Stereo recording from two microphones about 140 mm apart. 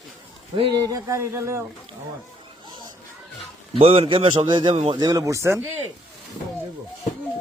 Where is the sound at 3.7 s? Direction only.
40° right (ahead or behind).